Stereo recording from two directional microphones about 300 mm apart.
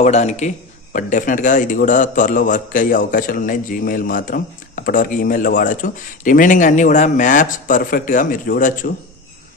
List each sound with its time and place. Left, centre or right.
0.0 s a man's voice: left